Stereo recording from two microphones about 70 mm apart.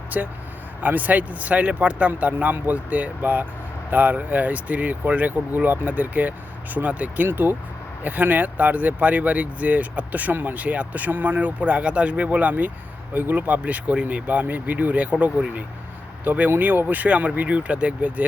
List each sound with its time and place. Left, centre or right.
0.1 s speech: centre